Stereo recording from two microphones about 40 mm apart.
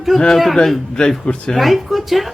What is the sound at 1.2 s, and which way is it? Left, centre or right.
Speech, left.